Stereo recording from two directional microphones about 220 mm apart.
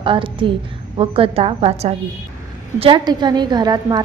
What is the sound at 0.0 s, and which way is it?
A woman's voice, 25° right (ahead or behind).